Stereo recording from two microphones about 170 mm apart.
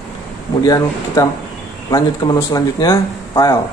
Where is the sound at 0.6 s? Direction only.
20° left (ahead or behind).